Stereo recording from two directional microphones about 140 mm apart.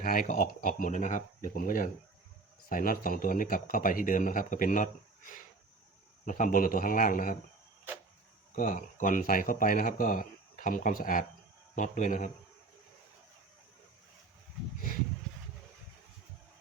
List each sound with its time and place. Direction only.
0.0 s speech: 85° left
8.5 s speech: 75° left (ahead or behind)
11.7 s speech: 65° left (ahead or behind)